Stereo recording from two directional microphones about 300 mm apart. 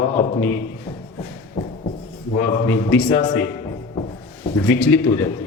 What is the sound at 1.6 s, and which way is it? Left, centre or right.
Music, centre.